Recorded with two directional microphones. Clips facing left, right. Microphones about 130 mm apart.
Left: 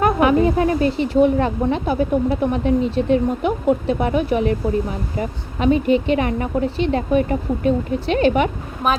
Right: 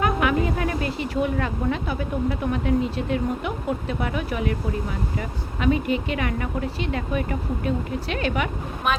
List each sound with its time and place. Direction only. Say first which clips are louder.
0.0 s a woman's voice: left 7 dB; 30° left (ahead or behind)